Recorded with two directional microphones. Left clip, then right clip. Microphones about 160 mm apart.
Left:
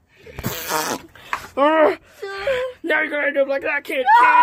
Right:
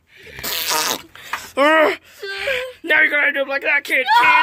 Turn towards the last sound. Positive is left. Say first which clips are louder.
# right 5 dB
turn(degrees=10)  # may be behind; listen again after turning